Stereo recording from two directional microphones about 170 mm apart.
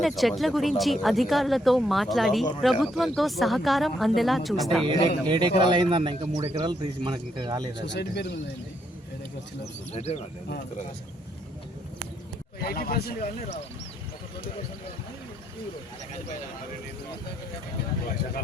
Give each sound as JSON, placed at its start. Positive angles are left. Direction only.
{"t": 0.0, "sound": "speech", "side_deg": 0}
{"t": 4.9, "sound": "speech", "side_deg": -30}
{"t": 7.9, "sound": "speech", "side_deg": 80}
{"t": 9.9, "sound": "speech", "side_deg": 40}
{"t": 12.5, "sound": "speech", "side_deg": 60}